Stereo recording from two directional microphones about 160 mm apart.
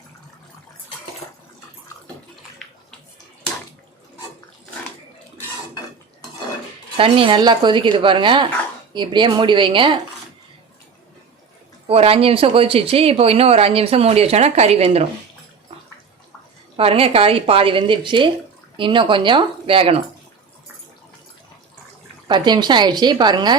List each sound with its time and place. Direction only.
6.9 s a woman's voice: 35° right (ahead or behind)
11.9 s speech: 35° right (ahead or behind)
16.7 s speech: 35° right (ahead or behind)
22.3 s a woman's voice: 25° right (ahead or behind)